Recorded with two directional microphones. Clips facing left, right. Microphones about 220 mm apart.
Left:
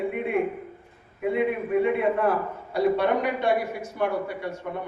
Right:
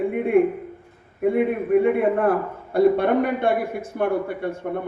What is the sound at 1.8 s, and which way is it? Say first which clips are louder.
A man's voice: right 4 dB; 55° right (ahead or behind).